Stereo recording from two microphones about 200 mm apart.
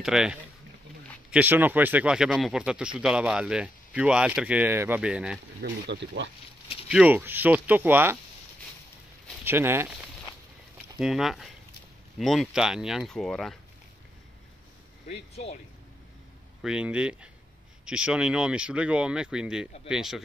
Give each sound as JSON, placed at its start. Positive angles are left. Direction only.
{"t": 0.0, "sound": "speech", "side_deg": -5}
{"t": 5.6, "sound": "speech", "side_deg": -60}
{"t": 6.9, "sound": "speech", "side_deg": -5}
{"t": 9.4, "sound": "speech", "side_deg": -10}
{"t": 11.0, "sound": "speech", "side_deg": 0}
{"t": 15.0, "sound": "speech", "side_deg": 35}
{"t": 16.6, "sound": "speech", "side_deg": -5}